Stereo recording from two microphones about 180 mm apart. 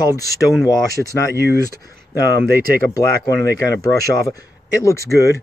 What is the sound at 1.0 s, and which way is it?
Speech, 5° left (ahead or behind).